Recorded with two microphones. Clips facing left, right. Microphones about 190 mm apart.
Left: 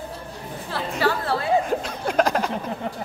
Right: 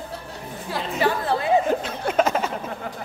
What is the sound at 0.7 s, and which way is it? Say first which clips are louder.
Chatter: right 1 dB; 20° right (ahead or behind).